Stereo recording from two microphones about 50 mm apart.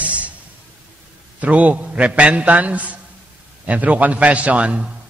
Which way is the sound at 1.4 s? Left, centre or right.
Right.